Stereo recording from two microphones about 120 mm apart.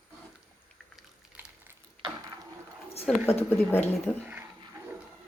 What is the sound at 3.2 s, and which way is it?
Speech, 15° left (ahead or behind).